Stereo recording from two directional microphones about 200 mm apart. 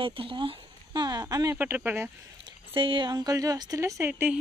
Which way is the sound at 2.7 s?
25° right (ahead or behind).